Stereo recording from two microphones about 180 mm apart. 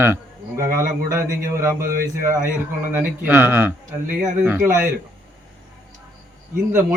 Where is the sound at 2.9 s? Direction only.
10° right (ahead or behind).